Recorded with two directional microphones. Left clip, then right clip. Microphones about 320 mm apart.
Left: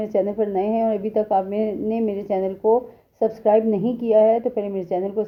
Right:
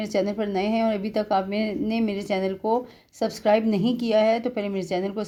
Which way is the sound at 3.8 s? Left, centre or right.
Right.